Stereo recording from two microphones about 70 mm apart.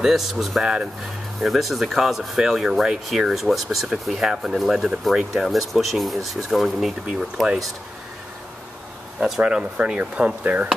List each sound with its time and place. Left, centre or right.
0.0 s speech: centre
9.4 s speech: centre